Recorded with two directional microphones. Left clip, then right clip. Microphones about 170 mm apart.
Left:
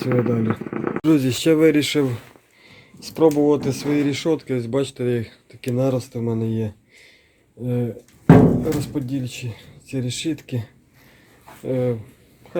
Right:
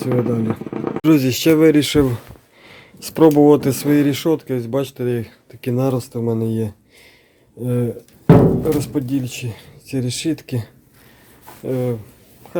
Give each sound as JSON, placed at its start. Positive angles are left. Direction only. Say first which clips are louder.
{"t": 0.0, "sound": "speech", "louder": "right 1 dB", "side_deg": 0}
{"t": 2.6, "sound": "speech", "louder": "right 4 dB", "side_deg": -50}
{"t": 4.3, "sound": "speech", "louder": "right 3 dB", "side_deg": -10}
{"t": 5.5, "sound": "speech", "louder": "right 2 dB", "side_deg": -25}
{"t": 7.6, "sound": "speech", "louder": "right 4 dB", "side_deg": -30}
{"t": 11.6, "sound": "speech", "louder": "even", "side_deg": -15}